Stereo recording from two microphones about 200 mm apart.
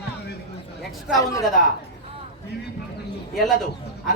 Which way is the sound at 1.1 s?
15° left (ahead or behind).